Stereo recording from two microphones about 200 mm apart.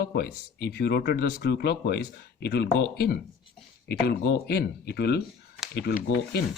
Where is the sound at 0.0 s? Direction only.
50° left (ahead or behind).